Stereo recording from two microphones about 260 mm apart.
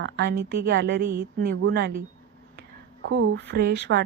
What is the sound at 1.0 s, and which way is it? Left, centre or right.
Speech, right.